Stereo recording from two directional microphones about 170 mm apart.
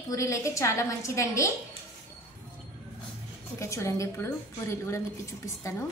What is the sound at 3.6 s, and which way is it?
A woman's voice, 15° left (ahead or behind).